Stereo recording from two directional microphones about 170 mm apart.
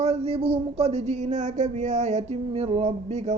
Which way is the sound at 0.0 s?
40° right (ahead or behind).